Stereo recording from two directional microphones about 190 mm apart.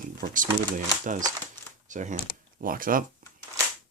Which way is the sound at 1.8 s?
40° right (ahead or behind).